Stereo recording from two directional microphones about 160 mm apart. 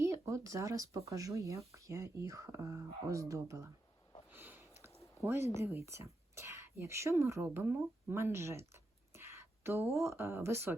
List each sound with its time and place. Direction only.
0.0 s speech: 20° right (ahead or behind)
4.3 s sniff: 10° right (ahead or behind)
4.9 s a sound: 20° left (ahead or behind)
5.2 s speech: 15° right (ahead or behind)